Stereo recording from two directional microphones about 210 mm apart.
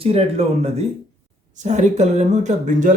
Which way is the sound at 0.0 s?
30° right (ahead or behind).